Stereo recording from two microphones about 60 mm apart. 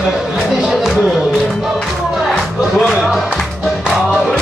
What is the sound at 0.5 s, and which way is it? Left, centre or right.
Music, centre.